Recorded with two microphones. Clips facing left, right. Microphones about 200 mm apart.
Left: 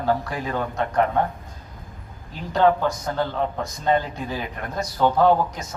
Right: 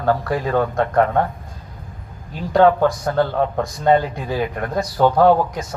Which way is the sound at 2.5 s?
55° right (ahead or behind).